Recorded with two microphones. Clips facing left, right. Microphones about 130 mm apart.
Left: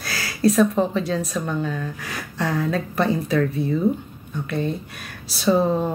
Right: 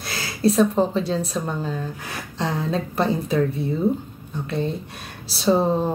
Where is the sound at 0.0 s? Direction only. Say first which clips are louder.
Left 1 dB; 25° right (ahead or behind).